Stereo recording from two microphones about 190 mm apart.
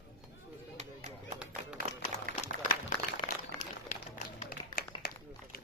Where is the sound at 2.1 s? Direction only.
40° left (ahead or behind).